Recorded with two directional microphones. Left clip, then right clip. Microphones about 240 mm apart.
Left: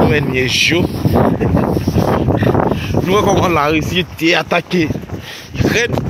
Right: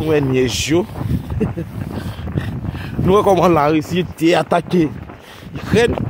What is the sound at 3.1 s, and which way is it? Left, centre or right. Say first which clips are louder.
Speech: right 1 dB; right.